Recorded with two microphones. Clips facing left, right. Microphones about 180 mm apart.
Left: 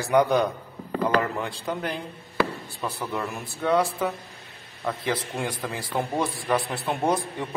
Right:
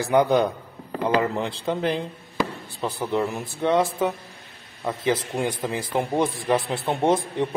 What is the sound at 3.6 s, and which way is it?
Speech, 20° right (ahead or behind).